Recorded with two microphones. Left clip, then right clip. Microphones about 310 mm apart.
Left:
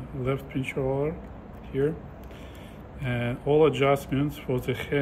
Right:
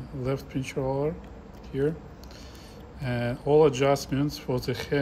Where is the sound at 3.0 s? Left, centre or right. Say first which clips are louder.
Even; centre.